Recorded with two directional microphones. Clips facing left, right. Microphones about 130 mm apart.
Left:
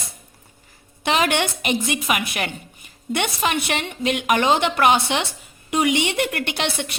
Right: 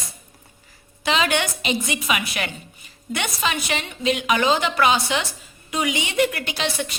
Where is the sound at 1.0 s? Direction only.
55° left (ahead or behind).